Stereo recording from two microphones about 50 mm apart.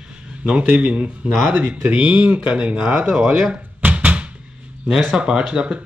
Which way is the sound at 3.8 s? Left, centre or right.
Right.